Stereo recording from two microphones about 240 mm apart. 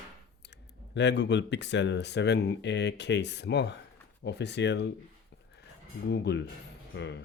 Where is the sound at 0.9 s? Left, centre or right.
Left.